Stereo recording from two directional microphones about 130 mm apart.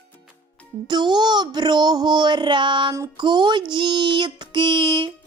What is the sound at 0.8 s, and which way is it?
A child's voice, 35° right (ahead or behind).